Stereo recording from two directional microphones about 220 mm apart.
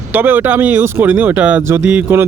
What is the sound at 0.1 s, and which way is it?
Speech, 10° right (ahead or behind).